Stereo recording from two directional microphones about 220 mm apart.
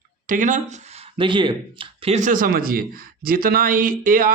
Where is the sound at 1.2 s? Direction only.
20° right (ahead or behind).